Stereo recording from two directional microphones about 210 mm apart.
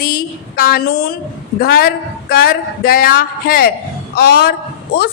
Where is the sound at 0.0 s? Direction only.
45° left (ahead or behind).